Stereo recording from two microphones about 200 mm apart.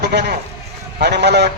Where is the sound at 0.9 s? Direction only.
55° right (ahead or behind).